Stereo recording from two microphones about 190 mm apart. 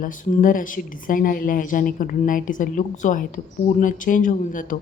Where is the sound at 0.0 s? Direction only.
45° left (ahead or behind).